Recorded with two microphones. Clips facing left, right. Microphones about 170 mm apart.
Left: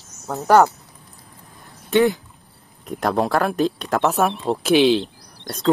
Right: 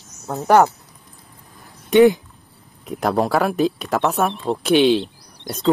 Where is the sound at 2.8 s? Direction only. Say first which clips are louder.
Right 1 dB; centre (ahead or behind).